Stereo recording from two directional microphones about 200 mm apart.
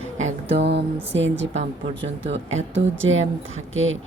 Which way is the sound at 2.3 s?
70° right (ahead or behind).